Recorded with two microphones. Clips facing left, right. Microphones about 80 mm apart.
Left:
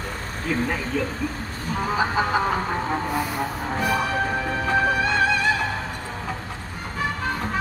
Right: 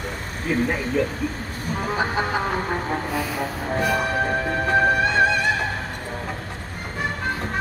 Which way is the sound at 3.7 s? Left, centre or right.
Centre.